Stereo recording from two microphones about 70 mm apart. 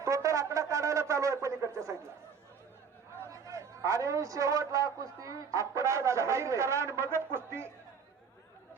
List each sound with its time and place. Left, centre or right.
0.0 s a man's voice: right
3.4 s a man's voice: right